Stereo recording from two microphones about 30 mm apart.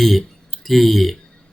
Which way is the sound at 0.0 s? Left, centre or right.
Centre.